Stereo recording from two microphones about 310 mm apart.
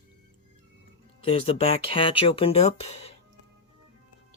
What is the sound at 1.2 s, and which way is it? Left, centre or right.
Speech, centre.